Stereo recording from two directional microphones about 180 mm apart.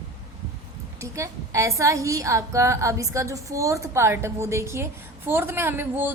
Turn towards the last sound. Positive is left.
turn(degrees=-10)  # may be behind; listen again after turning